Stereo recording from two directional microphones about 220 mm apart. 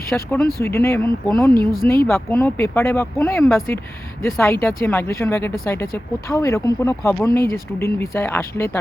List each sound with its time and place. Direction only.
0.1 s speech: centre (ahead or behind)
0.6 s speech: 10° left (ahead or behind)
1.5 s speech: 40° left (ahead or behind)
2.0 s speech: 10° left (ahead or behind)